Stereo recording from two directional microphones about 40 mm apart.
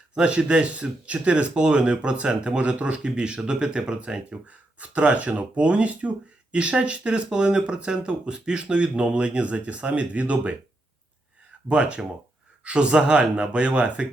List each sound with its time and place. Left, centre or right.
0.1 s speech: right
11.7 s speech: right